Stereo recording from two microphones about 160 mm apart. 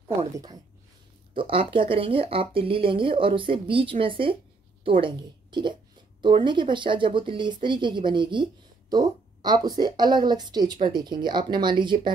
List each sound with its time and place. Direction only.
1.3 s a woman's voice: 35° right (ahead or behind)